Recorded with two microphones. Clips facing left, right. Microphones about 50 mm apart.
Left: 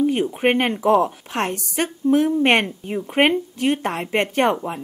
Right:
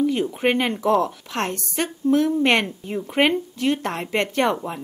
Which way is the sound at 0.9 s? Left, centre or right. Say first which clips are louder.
Left 3 dB; centre.